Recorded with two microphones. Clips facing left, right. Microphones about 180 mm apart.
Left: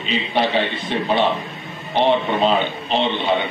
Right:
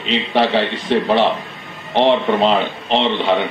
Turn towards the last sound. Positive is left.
turn(degrees=-90)